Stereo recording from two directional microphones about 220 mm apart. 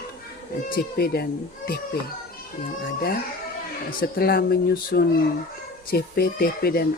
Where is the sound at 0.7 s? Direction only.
40° left (ahead or behind).